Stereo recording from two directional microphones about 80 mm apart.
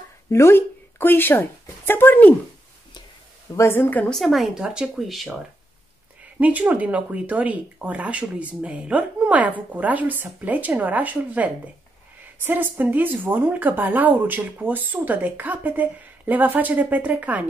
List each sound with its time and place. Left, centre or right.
0.3 s a woman's voice: left
3.5 s a woman's voice: left
4.1 s speech: centre
6.4 s speech: centre